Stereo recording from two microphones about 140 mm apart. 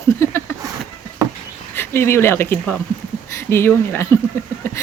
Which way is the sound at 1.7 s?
20° left (ahead or behind).